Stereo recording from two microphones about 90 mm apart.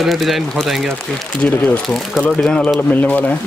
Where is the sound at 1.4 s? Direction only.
15° left (ahead or behind).